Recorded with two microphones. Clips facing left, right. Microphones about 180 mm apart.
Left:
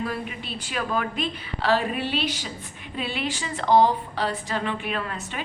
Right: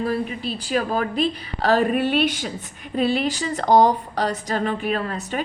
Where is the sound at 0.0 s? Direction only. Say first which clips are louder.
Right 6 dB; 40° right (ahead or behind).